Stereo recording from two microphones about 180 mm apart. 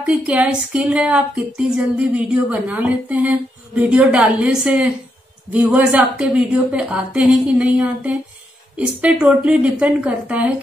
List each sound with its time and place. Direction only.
0.0 s speech: 5° right (ahead or behind)